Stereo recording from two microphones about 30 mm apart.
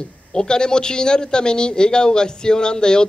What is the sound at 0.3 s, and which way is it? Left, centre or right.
A man's voice, left.